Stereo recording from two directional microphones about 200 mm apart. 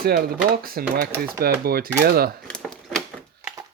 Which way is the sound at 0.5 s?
50° right (ahead or behind).